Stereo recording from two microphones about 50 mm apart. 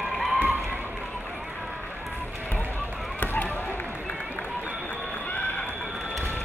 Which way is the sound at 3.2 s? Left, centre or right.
Left.